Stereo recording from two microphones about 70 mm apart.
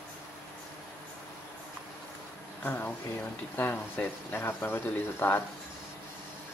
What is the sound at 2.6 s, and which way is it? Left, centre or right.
Speech, left.